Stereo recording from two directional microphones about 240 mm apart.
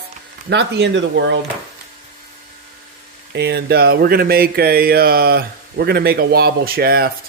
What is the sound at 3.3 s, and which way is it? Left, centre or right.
Speech, right.